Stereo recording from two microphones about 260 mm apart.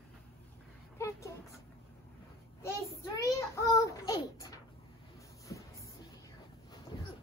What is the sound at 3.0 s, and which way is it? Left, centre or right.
Child singing, centre.